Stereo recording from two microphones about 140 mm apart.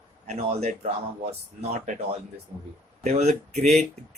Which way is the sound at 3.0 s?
50° right (ahead or behind).